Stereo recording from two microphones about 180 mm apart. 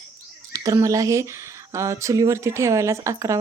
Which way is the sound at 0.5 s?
20° right (ahead or behind).